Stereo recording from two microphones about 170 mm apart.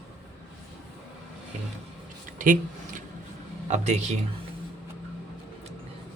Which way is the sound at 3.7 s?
40° right (ahead or behind).